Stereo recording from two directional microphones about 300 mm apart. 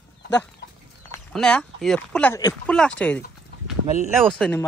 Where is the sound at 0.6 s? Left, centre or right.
Left.